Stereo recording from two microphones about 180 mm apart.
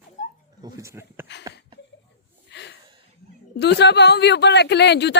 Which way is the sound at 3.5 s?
70° left (ahead or behind).